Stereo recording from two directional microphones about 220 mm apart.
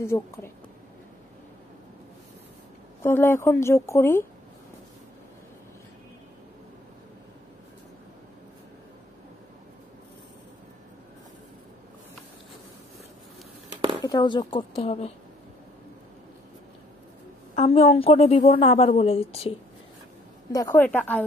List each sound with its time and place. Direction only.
0.0 s a woman's voice: 10° left (ahead or behind)
3.0 s a woman's voice: 10° left (ahead or behind)
14.0 s a woman's voice: 20° left (ahead or behind)
17.6 s a woman's voice: 30° left (ahead or behind)
20.5 s a woman's voice: 10° left (ahead or behind)